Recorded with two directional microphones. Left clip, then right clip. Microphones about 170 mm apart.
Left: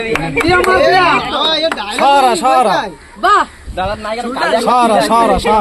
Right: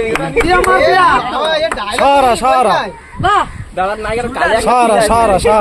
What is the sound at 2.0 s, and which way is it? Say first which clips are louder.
Speech: even; 65° right (ahead or behind).